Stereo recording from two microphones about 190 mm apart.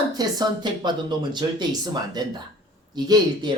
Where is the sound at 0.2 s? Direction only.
20° right (ahead or behind).